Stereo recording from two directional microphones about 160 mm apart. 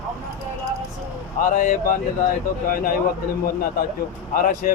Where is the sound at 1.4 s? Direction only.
60° left (ahead or behind).